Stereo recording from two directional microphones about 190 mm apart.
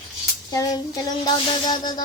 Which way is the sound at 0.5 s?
20° left (ahead or behind).